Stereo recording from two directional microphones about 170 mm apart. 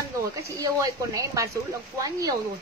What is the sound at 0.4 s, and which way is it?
Speech, 20° right (ahead or behind).